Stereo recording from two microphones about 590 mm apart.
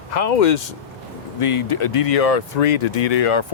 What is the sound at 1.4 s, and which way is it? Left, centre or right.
Speech, left.